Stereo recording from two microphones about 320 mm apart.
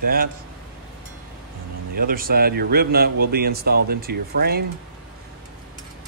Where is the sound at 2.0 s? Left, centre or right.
Right.